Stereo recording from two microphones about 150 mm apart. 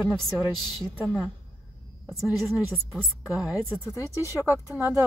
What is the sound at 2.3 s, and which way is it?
A woman's voice, centre (ahead or behind).